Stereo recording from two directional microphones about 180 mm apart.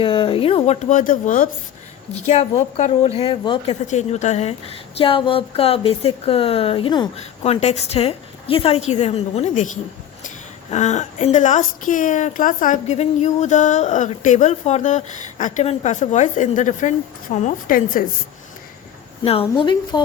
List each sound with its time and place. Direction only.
0.0 s a woman's voice: 30° left (ahead or behind)
3.8 s a woman's voice: 40° left (ahead or behind)
7.2 s a woman's voice: 35° left (ahead or behind)
19.2 s a woman's voice: 30° left (ahead or behind)